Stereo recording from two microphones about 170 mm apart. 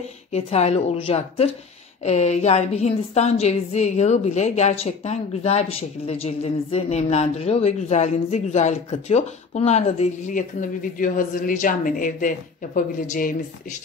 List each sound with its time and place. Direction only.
0.3 s a woman's voice: 40° left (ahead or behind); by 13.4 s 55° left (ahead or behind)